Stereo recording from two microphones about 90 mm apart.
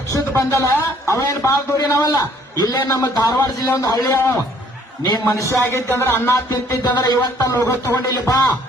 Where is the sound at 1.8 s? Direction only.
45° left (ahead or behind).